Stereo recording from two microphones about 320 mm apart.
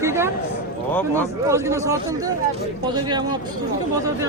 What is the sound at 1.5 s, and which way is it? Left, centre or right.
Speech, centre.